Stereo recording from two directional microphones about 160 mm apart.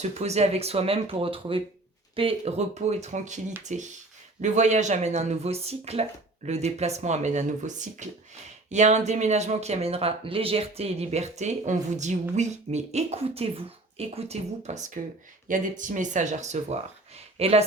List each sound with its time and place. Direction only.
0.0 s speech: 45° right (ahead or behind)